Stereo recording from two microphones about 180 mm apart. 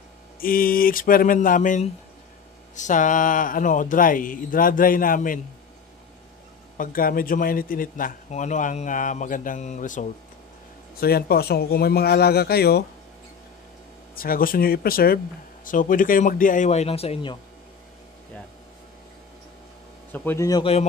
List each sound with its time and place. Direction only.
0.4 s a man's voice: 50° left (ahead or behind)
6.8 s a man's voice: 50° left (ahead or behind)
11.0 s speech: 60° left (ahead or behind)
14.1 s a man's voice: 55° left (ahead or behind); by 17.4 s 30° left (ahead or behind)
20.1 s speech: 15° left (ahead or behind)